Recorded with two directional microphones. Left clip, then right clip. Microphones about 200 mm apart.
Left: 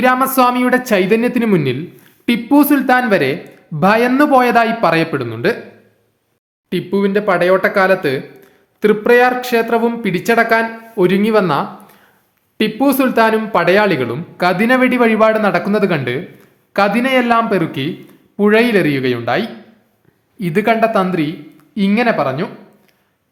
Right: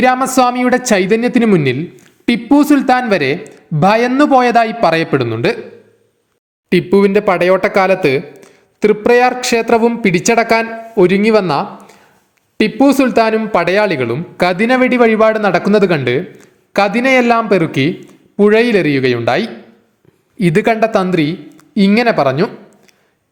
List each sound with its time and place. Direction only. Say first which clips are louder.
0.0 s a man's voice: right 1 dB; 25° right (ahead or behind)
6.7 s a man's voice: right 6 dB; 30° right (ahead or behind)